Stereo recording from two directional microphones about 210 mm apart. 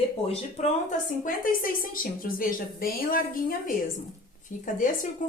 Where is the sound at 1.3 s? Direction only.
40° left (ahead or behind).